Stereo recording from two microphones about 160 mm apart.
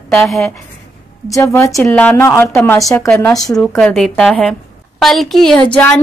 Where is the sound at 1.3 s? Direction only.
20° left (ahead or behind).